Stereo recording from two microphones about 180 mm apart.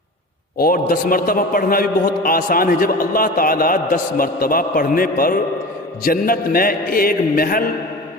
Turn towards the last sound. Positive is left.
turn(degrees=55)  # may be behind; listen again after turning